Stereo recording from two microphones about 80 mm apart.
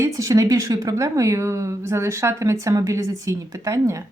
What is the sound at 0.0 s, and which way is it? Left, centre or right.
Speech, right.